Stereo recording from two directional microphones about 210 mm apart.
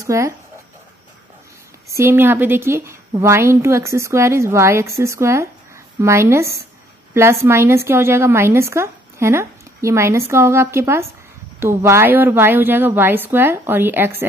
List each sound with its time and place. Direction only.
0.0 s speech: 15° right (ahead or behind)
2.0 s a woman's voice: 10° right (ahead or behind)